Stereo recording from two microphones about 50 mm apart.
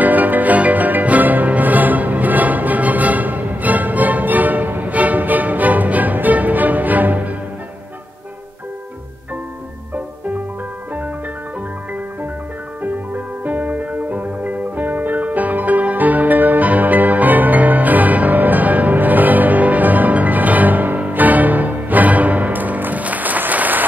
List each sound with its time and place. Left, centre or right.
0.0 s music: right
12.8 s music: right